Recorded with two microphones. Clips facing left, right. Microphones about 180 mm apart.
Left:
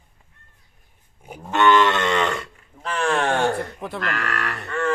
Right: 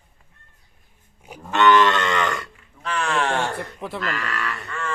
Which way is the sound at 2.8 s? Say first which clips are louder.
Left 2 dB; 45° left (ahead or behind).